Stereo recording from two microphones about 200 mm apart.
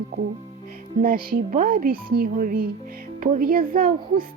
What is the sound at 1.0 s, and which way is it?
A woman's voice, 45° right (ahead or behind).